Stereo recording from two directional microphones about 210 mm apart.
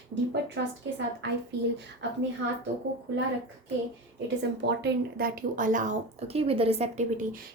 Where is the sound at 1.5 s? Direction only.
55° right (ahead or behind).